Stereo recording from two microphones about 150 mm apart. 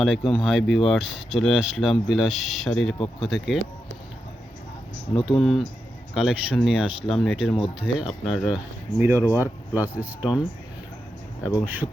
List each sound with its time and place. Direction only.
0.4 s speech: centre (ahead or behind)
5.4 s speech: centre (ahead or behind)
11.5 s speech: 10° right (ahead or behind)